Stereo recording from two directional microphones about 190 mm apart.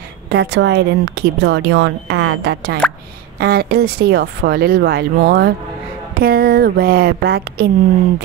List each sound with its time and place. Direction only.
0.3 s speech: 65° right (ahead or behind)